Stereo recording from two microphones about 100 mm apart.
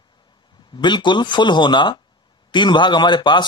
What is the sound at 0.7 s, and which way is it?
Speech, 50° left (ahead or behind).